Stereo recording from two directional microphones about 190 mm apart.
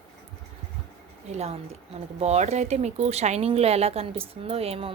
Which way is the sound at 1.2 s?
35° right (ahead or behind).